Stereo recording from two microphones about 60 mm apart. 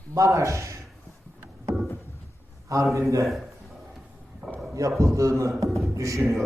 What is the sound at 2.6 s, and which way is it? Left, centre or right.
Speech, right.